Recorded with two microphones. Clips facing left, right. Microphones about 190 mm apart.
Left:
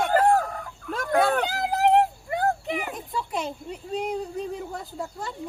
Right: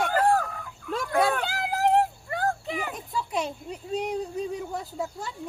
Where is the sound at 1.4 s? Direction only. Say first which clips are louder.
Left 3 dB; 20° left (ahead or behind).